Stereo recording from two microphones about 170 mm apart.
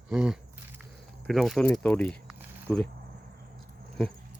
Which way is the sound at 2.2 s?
10° right (ahead or behind).